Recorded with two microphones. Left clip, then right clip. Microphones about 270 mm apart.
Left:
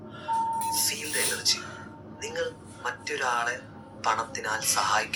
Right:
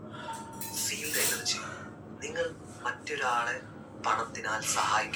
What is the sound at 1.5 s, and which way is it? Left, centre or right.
Speech, left.